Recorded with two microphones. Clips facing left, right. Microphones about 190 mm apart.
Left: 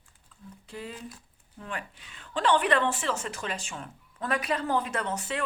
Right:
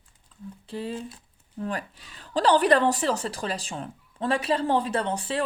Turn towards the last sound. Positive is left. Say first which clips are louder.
# right 5 dB
turn(degrees=-30)  # may be behind; listen again after turning